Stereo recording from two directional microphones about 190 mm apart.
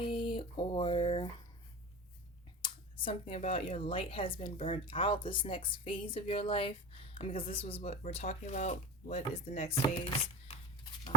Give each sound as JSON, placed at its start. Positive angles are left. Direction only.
{"t": 0.0, "sound": "a sound", "side_deg": 25}
{"t": 2.6, "sound": "speech", "side_deg": 25}
{"t": 9.8, "sound": "chopping", "side_deg": 30}